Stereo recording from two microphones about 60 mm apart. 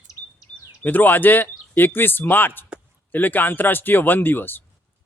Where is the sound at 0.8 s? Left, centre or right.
Left.